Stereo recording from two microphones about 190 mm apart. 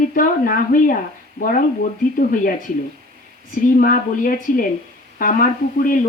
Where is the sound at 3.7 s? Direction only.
50° left (ahead or behind).